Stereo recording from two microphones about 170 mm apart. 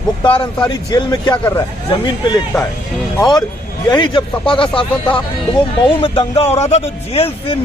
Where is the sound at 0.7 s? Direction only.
25° left (ahead or behind).